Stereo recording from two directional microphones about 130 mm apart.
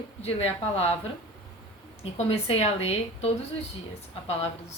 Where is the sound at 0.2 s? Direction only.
50° left (ahead or behind).